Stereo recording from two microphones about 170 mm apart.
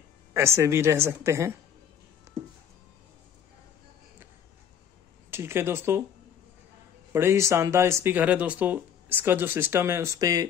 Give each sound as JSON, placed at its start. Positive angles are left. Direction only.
{"t": 0.3, "sound": "speech", "side_deg": -15}
{"t": 2.3, "sound": "music", "side_deg": -20}
{"t": 5.3, "sound": "speech", "side_deg": -15}
{"t": 7.1, "sound": "speech", "side_deg": -15}